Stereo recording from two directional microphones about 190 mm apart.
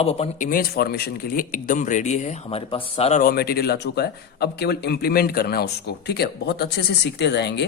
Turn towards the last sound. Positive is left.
turn(degrees=65)  # may be behind; listen again after turning